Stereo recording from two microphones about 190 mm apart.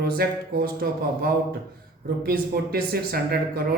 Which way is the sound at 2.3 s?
55° right (ahead or behind).